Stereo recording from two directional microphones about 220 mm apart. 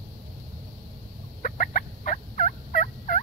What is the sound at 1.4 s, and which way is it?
Fowl, 40° left (ahead or behind).